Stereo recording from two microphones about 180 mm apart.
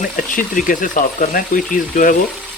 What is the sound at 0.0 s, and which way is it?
Speech, 50° left (ahead or behind).